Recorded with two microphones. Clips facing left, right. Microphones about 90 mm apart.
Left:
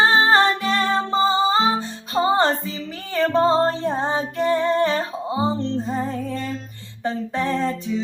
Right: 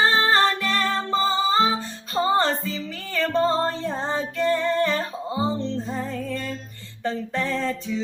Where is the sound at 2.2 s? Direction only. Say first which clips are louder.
Left 3 dB; 25° left (ahead or behind).